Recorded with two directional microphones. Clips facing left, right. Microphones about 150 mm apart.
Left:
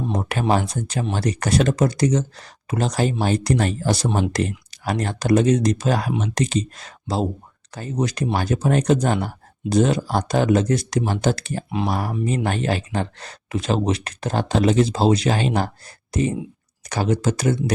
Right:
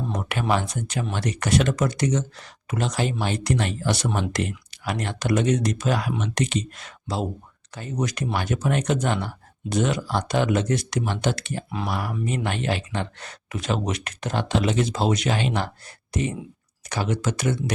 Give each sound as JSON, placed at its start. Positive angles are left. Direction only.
{"t": 0.1, "sound": "speech", "side_deg": 35}